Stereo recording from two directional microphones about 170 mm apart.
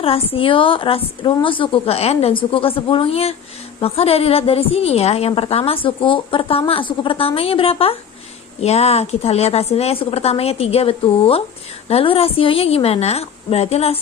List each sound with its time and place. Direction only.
0.3 s a woman's voice: 30° left (ahead or behind)